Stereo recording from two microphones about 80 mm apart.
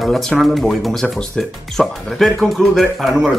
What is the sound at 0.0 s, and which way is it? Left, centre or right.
Speech, centre.